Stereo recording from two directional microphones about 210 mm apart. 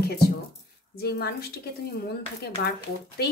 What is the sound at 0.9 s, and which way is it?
Speech, 50° left (ahead or behind).